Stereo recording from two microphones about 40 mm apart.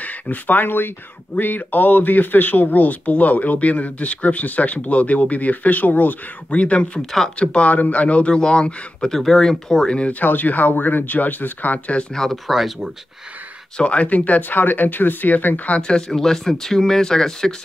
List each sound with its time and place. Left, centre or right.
0.0 s speech: left
1.4 s speech: left
6.5 s speech: left
7.0 s speech: centre
7.3 s speech: left
7.7 s speech: left
9.1 s speech: centre
10.1 s speech: left
12.1 s speech: centre
12.4 s speech: centre
13.7 s speech: left
14.6 s speech: left
15.8 s speech: left
16.1 s speech: centre